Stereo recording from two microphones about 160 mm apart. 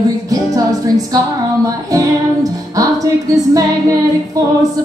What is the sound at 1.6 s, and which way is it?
Music, 20° right (ahead or behind).